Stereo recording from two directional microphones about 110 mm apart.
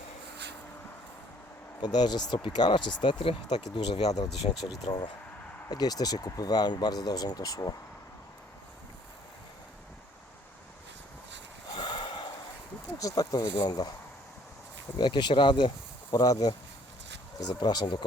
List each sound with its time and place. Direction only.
1.8 s speech: 40° left (ahead or behind)
4.4 s speech: 70° left (ahead or behind)
4.8 s speech: 35° left (ahead or behind)
11.7 s a sound: 45° left (ahead or behind)
13.0 s speech: 30° left (ahead or behind)
14.9 s speech: 45° left (ahead or behind)
16.1 s speech: 35° left (ahead or behind)